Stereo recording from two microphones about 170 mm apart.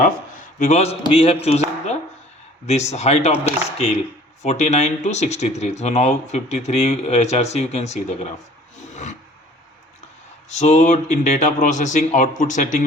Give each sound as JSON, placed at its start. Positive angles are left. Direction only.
{"t": 0.6, "sound": "speech", "side_deg": 40}
{"t": 10.5, "sound": "speech", "side_deg": 45}